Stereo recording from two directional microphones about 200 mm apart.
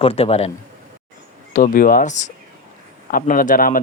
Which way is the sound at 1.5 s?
45° left (ahead or behind).